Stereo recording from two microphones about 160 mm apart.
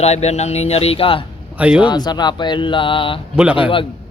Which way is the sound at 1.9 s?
25° left (ahead or behind).